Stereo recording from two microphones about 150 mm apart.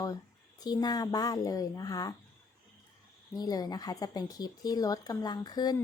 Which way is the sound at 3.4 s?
25° left (ahead or behind).